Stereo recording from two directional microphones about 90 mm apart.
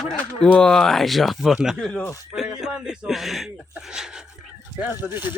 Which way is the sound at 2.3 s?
5° right (ahead or behind).